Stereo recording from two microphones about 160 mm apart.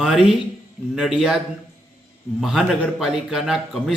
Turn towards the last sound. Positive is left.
turn(degrees=-5)  # may be behind; listen again after turning